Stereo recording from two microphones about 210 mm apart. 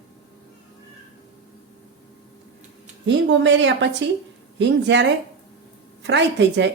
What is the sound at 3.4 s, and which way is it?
A woman's voice, 60° right (ahead or behind).